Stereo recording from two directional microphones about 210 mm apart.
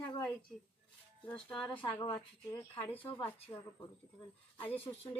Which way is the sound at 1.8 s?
20° left (ahead or behind).